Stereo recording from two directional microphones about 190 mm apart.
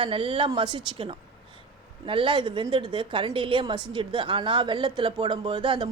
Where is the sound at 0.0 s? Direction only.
25° right (ahead or behind).